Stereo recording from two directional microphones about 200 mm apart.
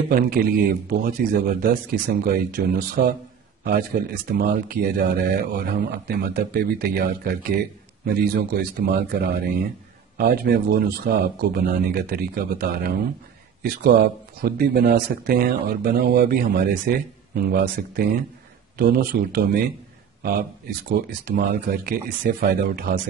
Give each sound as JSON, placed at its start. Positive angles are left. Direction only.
{"t": 0.1, "sound": "a man's voice", "side_deg": -45}